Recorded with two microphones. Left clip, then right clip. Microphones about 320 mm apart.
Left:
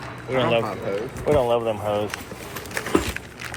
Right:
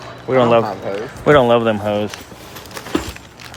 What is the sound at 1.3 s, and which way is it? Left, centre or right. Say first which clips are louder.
Speech: right 8 dB; right.